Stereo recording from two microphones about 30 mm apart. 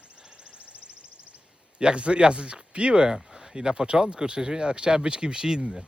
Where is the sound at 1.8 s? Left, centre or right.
Right.